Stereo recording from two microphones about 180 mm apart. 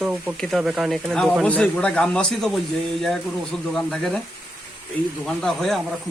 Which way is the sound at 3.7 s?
5° left (ahead or behind).